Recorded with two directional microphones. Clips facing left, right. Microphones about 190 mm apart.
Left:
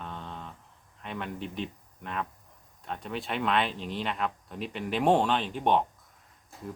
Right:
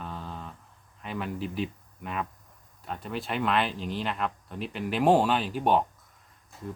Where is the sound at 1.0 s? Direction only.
5° right (ahead or behind).